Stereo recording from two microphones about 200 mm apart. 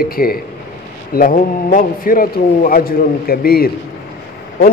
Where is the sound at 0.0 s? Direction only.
50° left (ahead or behind).